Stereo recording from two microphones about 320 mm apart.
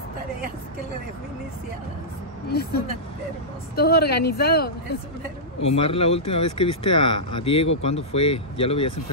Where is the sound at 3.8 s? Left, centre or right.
Left.